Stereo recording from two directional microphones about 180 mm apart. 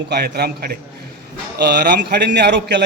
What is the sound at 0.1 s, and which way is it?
A man's voice, 60° right (ahead or behind).